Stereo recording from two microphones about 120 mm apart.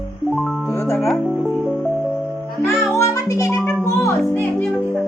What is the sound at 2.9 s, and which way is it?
Music, 25° left (ahead or behind).